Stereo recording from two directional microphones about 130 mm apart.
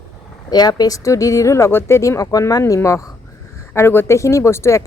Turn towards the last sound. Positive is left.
turn(degrees=20)  # may be behind; listen again after turning